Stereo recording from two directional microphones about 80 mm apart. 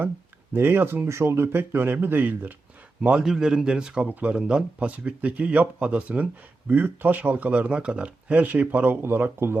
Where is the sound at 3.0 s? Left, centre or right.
Centre.